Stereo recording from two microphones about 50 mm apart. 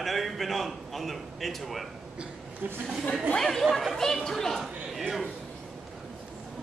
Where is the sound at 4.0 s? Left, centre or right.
Centre.